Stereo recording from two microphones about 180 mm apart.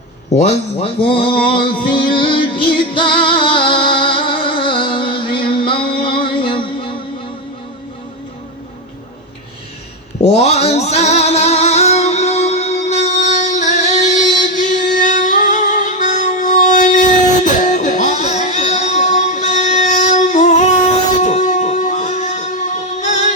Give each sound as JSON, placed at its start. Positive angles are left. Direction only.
{"t": 0.3, "sound": "a sound", "side_deg": 35}
{"t": 6.1, "sound": "music", "side_deg": 30}
{"t": 10.2, "sound": "music", "side_deg": 35}